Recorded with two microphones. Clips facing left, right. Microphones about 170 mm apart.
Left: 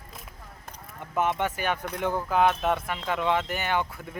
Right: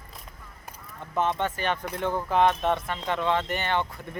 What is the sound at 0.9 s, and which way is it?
Speech, 10° left (ahead or behind).